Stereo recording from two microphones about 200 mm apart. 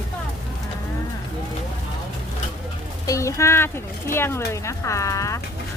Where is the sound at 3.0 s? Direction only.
15° left (ahead or behind).